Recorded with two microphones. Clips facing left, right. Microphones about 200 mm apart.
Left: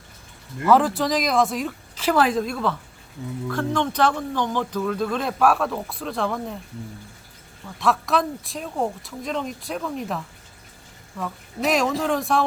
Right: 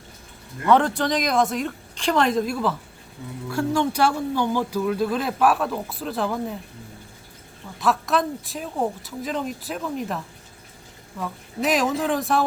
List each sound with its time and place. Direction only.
0.6 s speech: 5° left (ahead or behind)
7.8 s speech: centre (ahead or behind)